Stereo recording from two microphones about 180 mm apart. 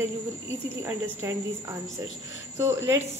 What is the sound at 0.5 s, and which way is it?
Speech, 15° right (ahead or behind).